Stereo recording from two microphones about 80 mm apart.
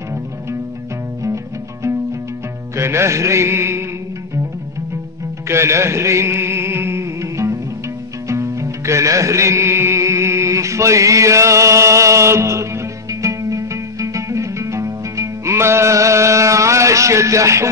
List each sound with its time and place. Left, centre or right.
1.2 s music: right
5.5 s music: right